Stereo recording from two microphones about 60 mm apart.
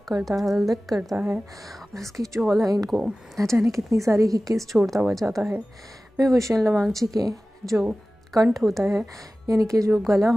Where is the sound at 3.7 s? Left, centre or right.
Right.